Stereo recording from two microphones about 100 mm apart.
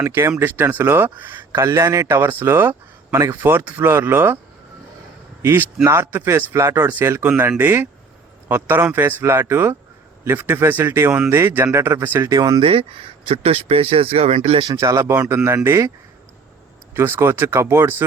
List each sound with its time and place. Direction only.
0.0 s speech: 25° right (ahead or behind)
1.5 s speech: 30° right (ahead or behind)
5.4 s speech: 25° right (ahead or behind)
12.3 s speech: 35° right (ahead or behind)
12.5 s speech: 65° right (ahead or behind)
14.8 s speech: 30° right (ahead or behind)
15.1 s speech: 15° right (ahead or behind)
15.4 s speech: 30° right (ahead or behind)
16.9 s speech: 25° right (ahead or behind)